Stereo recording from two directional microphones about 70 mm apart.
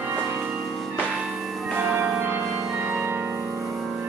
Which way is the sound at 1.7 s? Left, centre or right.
Right.